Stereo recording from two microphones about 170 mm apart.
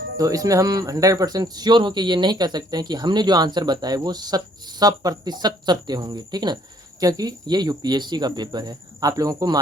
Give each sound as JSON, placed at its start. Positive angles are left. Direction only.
{"t": 0.2, "sound": "speech", "side_deg": -20}